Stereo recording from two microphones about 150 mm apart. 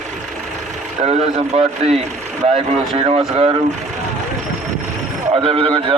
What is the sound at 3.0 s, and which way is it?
Speech, 40° right (ahead or behind).